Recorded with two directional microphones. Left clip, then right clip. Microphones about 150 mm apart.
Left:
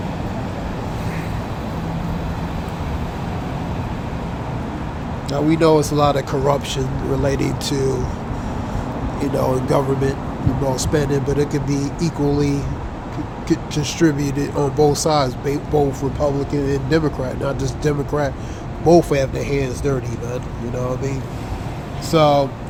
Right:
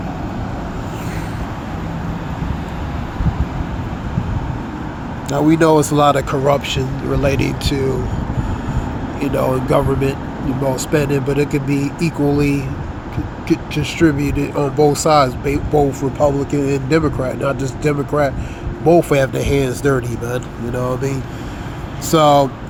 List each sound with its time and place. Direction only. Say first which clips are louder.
5.3 s speech: right 3 dB; 25° right (ahead or behind)
6.0 s speech: right 4 dB; 15° right (ahead or behind); by 7.9 s 5° left (ahead or behind)
9.2 s speech: right 2 dB; centre (ahead or behind)
17.0 s speech: right 3 dB; 5° right (ahead or behind)
19.4 s speech: right 4 dB; 30° right (ahead or behind)
22.1 s speech: right 3 dB; 20° right (ahead or behind)